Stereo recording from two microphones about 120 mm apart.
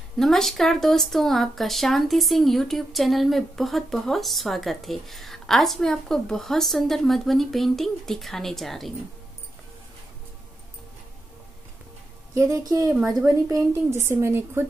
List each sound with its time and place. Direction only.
0.2 s speech: 5° left (ahead or behind)
12.4 s a woman's voice: 25° right (ahead or behind)